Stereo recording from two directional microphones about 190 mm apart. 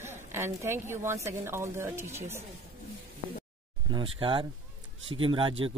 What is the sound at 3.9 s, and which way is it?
Speech, 25° right (ahead or behind).